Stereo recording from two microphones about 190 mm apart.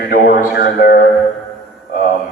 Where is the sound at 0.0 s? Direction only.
50° left (ahead or behind).